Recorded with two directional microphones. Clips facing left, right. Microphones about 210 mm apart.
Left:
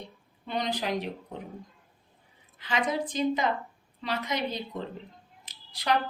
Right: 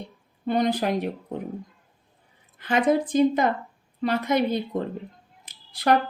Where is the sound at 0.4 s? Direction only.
50° right (ahead or behind).